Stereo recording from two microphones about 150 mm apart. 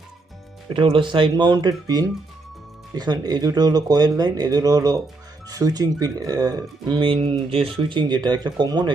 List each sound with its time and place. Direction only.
0.7 s speech: 35° right (ahead or behind)